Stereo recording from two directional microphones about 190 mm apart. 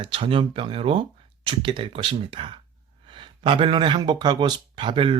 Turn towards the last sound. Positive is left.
turn(degrees=-25)  # may be behind; listen again after turning